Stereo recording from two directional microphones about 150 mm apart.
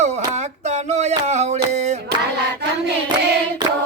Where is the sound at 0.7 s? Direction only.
50° right (ahead or behind).